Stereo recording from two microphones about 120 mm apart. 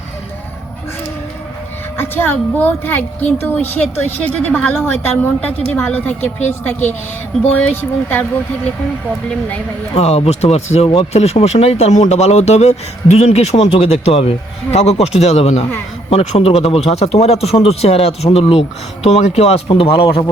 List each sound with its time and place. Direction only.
2.0 s a woman's voice: 20° left (ahead or behind)
9.9 s speech: 60° left (ahead or behind); by 20.3 s 45° left (ahead or behind)